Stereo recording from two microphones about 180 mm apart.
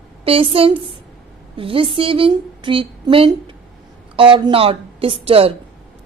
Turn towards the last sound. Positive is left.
turn(degrees=-30)  # may be behind; listen again after turning